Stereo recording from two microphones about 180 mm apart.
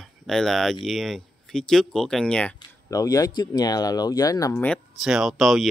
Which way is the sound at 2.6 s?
20° left (ahead or behind).